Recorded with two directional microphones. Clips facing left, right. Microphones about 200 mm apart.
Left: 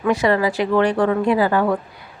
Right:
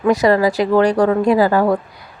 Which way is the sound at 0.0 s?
40° right (ahead or behind).